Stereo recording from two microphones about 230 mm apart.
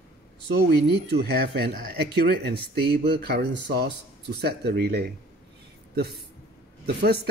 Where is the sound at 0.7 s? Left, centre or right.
Right.